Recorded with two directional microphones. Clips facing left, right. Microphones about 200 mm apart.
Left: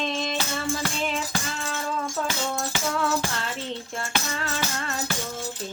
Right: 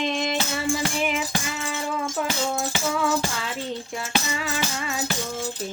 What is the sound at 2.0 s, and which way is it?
Music, 20° right (ahead or behind).